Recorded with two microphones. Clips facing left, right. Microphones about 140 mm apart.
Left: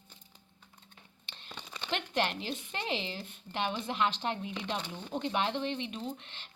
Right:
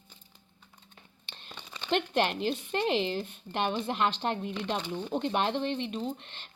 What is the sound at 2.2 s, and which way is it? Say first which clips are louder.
Speech: right 5 dB; 50° right (ahead or behind).